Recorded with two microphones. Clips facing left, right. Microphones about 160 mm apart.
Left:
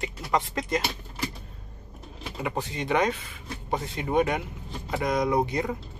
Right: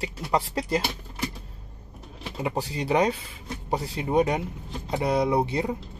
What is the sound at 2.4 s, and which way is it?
Speech, 35° right (ahead or behind).